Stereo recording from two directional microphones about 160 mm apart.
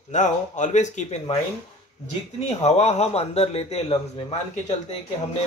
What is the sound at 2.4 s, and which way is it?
A man's voice, 45° left (ahead or behind).